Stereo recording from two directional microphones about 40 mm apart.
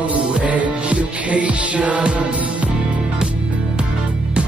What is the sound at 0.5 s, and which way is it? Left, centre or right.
Music, right.